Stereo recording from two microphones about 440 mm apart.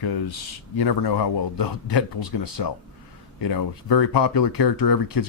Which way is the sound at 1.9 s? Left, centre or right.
Left.